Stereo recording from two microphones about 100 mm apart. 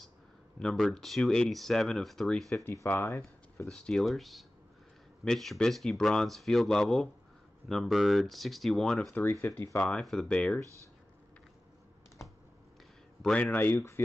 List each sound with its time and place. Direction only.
0.6 s speech: 5° left (ahead or behind)
2.6 s speech: 25° left (ahead or behind)
3.6 s speech: 5° left (ahead or behind)
9.1 s speech: 20° left (ahead or behind)
9.8 s speech: 10° left (ahead or behind)
13.2 s speech: 10° left (ahead or behind)